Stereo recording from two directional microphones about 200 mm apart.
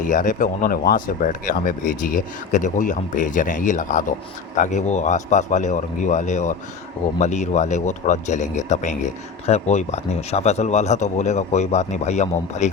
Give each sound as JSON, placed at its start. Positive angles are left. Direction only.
{"t": 0.0, "sound": "speech", "side_deg": 40}